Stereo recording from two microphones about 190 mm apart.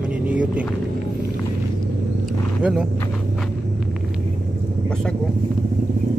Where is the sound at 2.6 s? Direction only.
5° right (ahead or behind).